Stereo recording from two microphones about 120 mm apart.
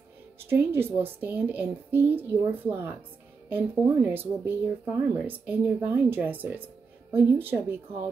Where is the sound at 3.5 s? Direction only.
15° right (ahead or behind).